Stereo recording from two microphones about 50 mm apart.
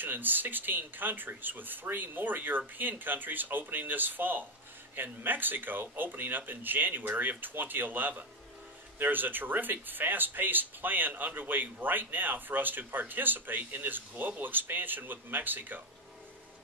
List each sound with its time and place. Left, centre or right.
0.0 s speech: right